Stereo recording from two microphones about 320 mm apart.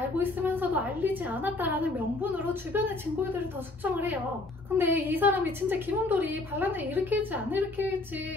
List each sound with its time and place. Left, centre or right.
0.2 s a woman's voice: centre
3.8 s a woman's voice: centre